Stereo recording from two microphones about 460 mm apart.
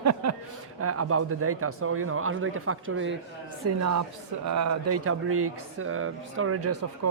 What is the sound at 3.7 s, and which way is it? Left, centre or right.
Speech, right.